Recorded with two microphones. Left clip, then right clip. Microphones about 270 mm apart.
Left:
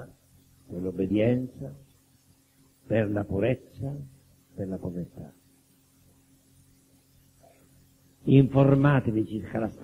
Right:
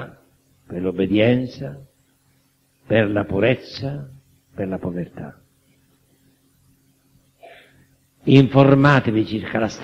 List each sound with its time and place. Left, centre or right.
0.8 s a man's voice: right
2.9 s a man's voice: right
8.3 s a man's voice: right